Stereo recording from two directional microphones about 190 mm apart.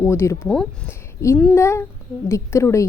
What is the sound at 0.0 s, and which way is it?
A woman's voice, 15° left (ahead or behind).